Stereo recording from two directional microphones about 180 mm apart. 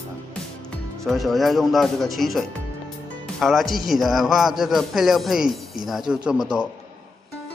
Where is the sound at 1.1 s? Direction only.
Centre (ahead or behind).